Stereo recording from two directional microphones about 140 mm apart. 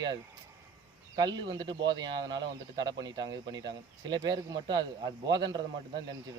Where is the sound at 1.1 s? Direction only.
30° right (ahead or behind).